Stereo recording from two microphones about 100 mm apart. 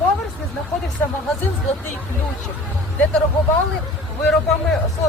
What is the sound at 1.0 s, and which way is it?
Speech, 15° left (ahead or behind).